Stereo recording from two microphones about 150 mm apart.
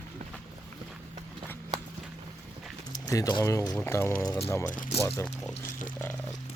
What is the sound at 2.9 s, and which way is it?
Speech, 25° left (ahead or behind).